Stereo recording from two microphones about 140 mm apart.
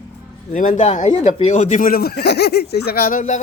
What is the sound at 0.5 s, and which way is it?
Speech, 60° left (ahead or behind).